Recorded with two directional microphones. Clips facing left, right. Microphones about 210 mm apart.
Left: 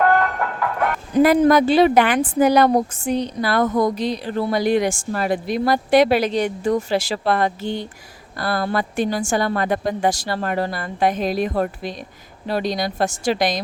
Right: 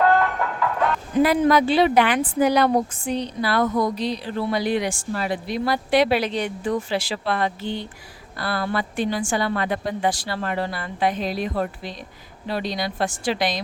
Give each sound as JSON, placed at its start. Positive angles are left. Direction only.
{"t": 1.2, "sound": "speech", "side_deg": 45}